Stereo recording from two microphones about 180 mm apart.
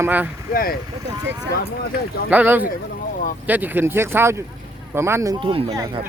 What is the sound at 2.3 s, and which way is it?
Speech, 10° right (ahead or behind).